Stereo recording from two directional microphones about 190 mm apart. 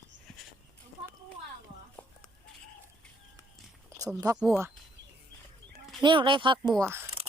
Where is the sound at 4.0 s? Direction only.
15° right (ahead or behind).